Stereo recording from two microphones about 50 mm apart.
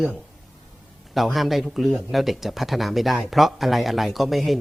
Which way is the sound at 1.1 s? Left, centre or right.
Centre.